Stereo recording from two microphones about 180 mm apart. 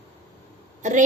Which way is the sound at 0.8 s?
40° right (ahead or behind).